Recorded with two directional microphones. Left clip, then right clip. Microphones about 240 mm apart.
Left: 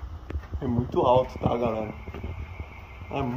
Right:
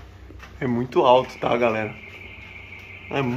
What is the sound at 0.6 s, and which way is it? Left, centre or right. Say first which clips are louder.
Speech: right 5 dB; right.